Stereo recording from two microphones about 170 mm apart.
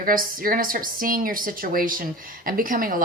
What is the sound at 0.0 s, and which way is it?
A woman's voice, 55° right (ahead or behind).